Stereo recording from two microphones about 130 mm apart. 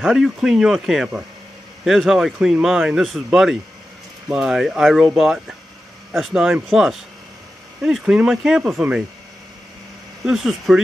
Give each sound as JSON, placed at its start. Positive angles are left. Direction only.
{"t": 0.0, "sound": "speech", "side_deg": -5}
{"t": 10.2, "sound": "speech", "side_deg": -5}